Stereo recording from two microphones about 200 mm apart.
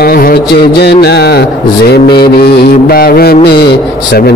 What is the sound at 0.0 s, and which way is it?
Music, 50° left (ahead or behind).